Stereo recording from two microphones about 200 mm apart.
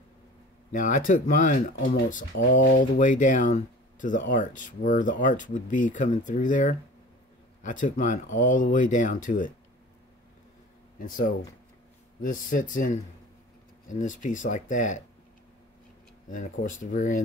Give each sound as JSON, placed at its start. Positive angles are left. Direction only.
{"t": 0.7, "sound": "speech", "side_deg": 40}
{"t": 11.0, "sound": "speech", "side_deg": 45}
{"t": 16.3, "sound": "speech", "side_deg": 40}